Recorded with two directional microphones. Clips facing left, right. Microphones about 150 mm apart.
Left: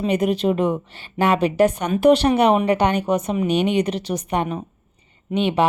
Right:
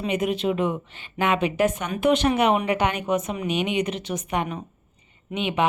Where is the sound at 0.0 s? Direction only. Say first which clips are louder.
Left 5 dB; 35° left (ahead or behind).